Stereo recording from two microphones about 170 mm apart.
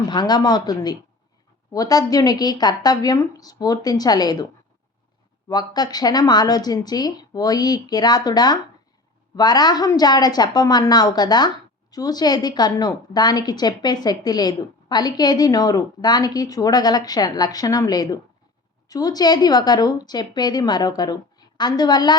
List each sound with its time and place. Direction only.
0.1 s a woman's voice: 25° left (ahead or behind)
5.5 s a woman's voice: 25° left (ahead or behind)